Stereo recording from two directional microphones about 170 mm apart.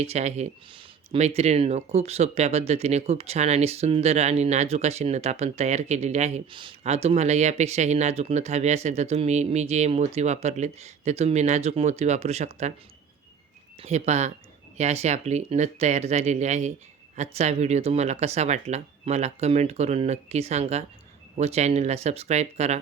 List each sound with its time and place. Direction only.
0.0 s speech: 40° right (ahead or behind)
6.5 s speech: 30° right (ahead or behind)
13.7 s speech: 40° right (ahead or behind)